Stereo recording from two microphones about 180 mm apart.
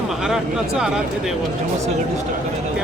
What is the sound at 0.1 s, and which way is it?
Speech, 5° right (ahead or behind).